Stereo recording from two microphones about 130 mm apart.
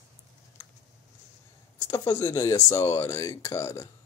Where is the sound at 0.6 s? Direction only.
15° left (ahead or behind).